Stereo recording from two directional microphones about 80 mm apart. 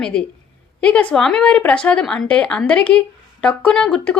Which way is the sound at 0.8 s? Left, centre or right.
Centre.